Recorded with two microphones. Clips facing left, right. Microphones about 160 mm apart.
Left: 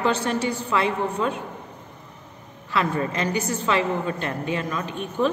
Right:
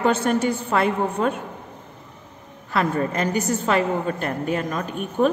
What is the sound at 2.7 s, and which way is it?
A woman's voice, 45° right (ahead or behind).